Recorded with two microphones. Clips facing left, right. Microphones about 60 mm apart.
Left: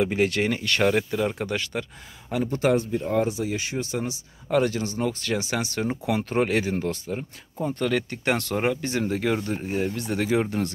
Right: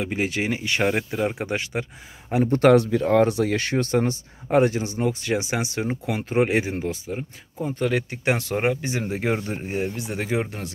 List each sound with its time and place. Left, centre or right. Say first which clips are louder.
0.0 s speech: left 3 dB; centre; by 2.5 s right
2.7 s speech: right 6 dB; right
4.5 s speech: right 3 dB; right; by 10.7 s centre